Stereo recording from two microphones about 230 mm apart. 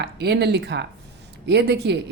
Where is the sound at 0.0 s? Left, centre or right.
Right.